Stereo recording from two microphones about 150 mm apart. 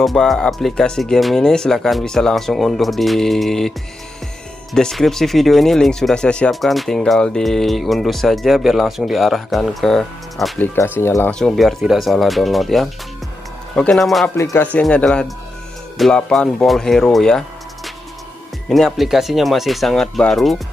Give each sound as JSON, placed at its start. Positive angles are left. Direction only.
{"t": 0.0, "sound": "speech", "side_deg": 0}
{"t": 4.7, "sound": "speech", "side_deg": 0}
{"t": 10.6, "sound": "speech", "side_deg": 15}
{"t": 11.3, "sound": "speech", "side_deg": 0}
{"t": 14.3, "sound": "speech", "side_deg": 20}